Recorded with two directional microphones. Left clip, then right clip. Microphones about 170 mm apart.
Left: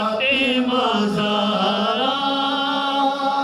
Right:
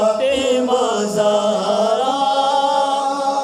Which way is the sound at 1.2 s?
45° right (ahead or behind).